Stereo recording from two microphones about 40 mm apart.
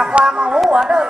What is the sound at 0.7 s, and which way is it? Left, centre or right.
Speech, centre.